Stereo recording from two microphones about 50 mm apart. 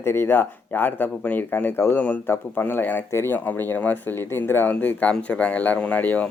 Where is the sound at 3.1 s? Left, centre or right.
Left.